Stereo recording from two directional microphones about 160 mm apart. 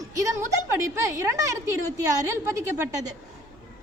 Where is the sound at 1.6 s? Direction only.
20° right (ahead or behind).